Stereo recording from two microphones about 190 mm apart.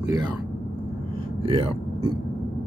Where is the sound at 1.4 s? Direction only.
30° right (ahead or behind).